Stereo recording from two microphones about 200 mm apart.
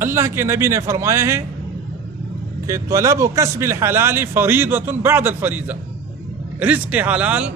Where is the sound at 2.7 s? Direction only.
15° right (ahead or behind).